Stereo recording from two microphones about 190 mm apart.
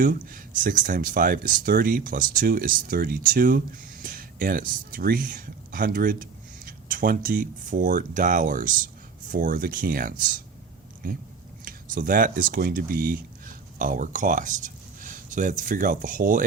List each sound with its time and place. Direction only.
0.0 s speech: 45° right (ahead or behind)